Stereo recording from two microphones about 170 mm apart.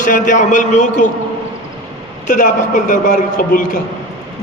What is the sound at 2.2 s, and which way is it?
A man's voice, 50° left (ahead or behind).